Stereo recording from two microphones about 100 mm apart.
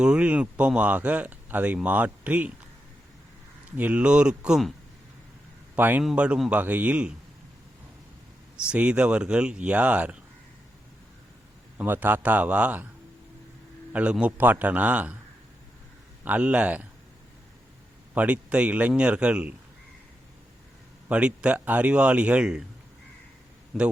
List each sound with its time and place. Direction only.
0.0 s speech: 10° right (ahead or behind)
3.8 s speech: 15° right (ahead or behind)
5.7 s a man's voice: 20° right (ahead or behind)
8.6 s speech: 10° right (ahead or behind)
11.8 s speech: 20° right (ahead or behind)
13.9 s speech: 10° right (ahead or behind)
16.2 s speech: 15° right (ahead or behind)
18.1 s speech: 15° right (ahead or behind)
21.1 s speech: 10° right (ahead or behind)
23.7 s a man's voice: centre (ahead or behind)